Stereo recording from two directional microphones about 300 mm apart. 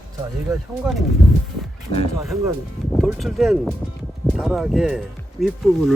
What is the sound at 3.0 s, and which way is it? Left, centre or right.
Speech, centre.